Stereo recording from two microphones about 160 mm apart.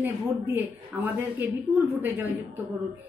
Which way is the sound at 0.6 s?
10° right (ahead or behind).